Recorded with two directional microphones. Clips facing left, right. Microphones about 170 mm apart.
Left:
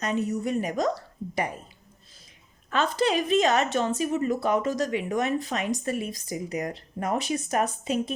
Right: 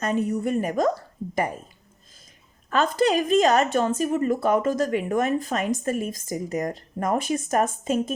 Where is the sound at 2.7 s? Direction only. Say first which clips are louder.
Right 3 dB; 45° right (ahead or behind).